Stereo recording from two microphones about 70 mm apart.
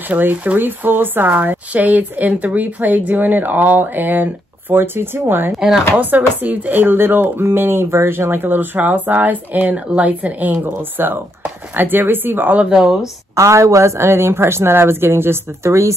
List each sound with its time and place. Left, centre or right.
0.1 s speech: right
5.6 s speech: centre
5.9 s speech: right
12.5 s speech: centre
13.4 s a woman's voice: right